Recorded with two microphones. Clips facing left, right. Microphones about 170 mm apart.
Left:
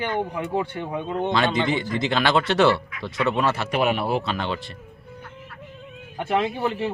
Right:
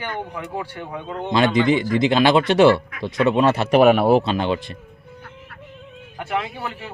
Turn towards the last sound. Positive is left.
turn(degrees=25)  # may be behind; listen again after turning